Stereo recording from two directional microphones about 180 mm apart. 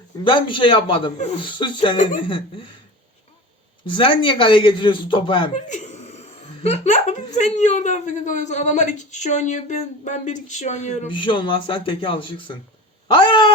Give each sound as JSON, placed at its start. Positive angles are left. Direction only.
{"t": 0.3, "sound": "speech", "side_deg": 30}
{"t": 2.0, "sound": "speech", "side_deg": 45}
{"t": 2.2, "sound": "speech", "side_deg": 30}
{"t": 3.8, "sound": "speech", "side_deg": 30}
{"t": 5.5, "sound": "laughter", "side_deg": 40}
{"t": 7.3, "sound": "a woman's voice", "side_deg": 40}
{"t": 11.1, "sound": "speech", "side_deg": 25}